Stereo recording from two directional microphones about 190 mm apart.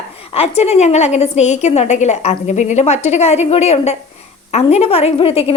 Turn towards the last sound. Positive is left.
turn(degrees=30)  # may be behind; listen again after turning